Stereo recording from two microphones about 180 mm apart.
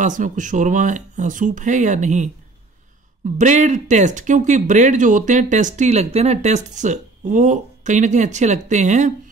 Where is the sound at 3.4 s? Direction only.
40° right (ahead or behind).